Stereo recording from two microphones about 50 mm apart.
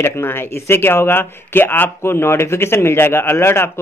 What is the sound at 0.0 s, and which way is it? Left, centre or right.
A man's voice, left.